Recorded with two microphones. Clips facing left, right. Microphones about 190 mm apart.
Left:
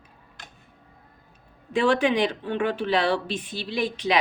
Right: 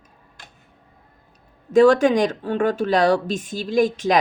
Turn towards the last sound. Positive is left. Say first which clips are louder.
# right 7 dB
turn(degrees=-45)  # may be behind; listen again after turning